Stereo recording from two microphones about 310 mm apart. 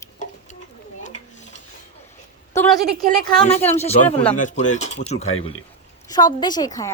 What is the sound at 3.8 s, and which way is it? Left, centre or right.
A woman's voice, centre.